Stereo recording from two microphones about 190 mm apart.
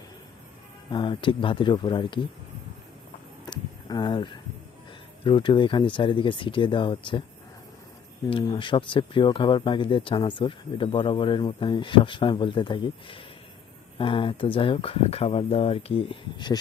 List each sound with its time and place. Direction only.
0.9 s speech: 25° left (ahead or behind)
3.4 s a sound: 20° left (ahead or behind)
5.2 s speech: 25° left (ahead or behind)
8.3 s speech: 25° left (ahead or behind)